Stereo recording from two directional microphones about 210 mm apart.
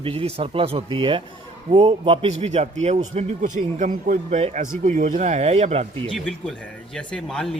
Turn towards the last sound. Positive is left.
turn(degrees=0)  # may be behind; listen again after turning